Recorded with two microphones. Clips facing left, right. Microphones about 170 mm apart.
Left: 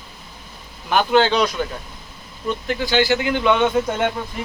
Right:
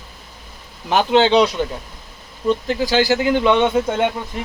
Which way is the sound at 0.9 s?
25° right (ahead or behind).